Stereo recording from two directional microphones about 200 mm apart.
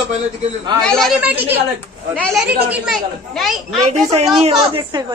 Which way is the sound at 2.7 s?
Centre (ahead or behind).